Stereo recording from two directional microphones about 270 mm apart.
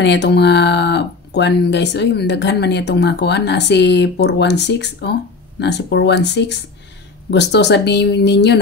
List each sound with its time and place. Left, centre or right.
0.0 s speech: left